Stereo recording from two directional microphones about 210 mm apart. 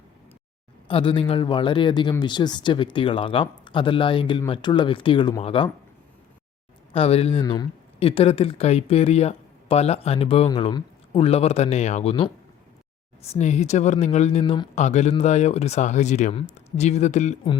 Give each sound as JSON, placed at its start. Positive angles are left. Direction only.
{"t": 0.9, "sound": "speech", "side_deg": 25}
{"t": 6.9, "sound": "speech", "side_deg": 30}